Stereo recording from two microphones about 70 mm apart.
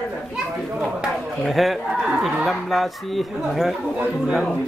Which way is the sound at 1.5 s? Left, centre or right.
Centre.